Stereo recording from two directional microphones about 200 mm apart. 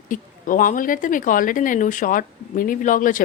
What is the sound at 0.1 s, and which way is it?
A woman's voice, 40° left (ahead or behind).